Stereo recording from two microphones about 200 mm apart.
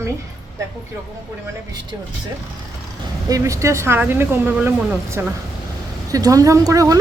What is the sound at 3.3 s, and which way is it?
Speech, 15° right (ahead or behind).